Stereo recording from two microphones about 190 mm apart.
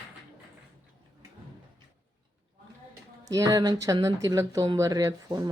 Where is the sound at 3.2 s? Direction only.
15° right (ahead or behind).